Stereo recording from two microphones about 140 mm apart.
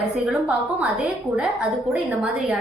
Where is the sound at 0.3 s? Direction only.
10° right (ahead or behind).